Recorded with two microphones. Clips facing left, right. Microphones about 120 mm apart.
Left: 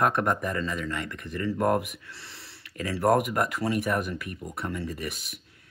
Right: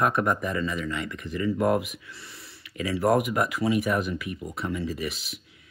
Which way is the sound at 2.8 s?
50° left (ahead or behind).